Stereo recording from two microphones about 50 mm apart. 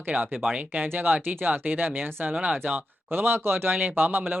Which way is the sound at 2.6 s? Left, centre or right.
Right.